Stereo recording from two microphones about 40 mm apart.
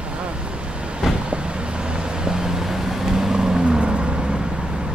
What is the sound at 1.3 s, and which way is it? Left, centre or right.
Vehicle, right.